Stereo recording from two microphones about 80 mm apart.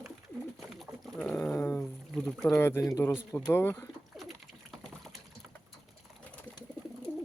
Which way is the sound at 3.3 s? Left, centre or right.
Centre.